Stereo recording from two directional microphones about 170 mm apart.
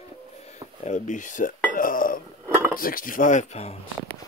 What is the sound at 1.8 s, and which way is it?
Dishes, 55° left (ahead or behind).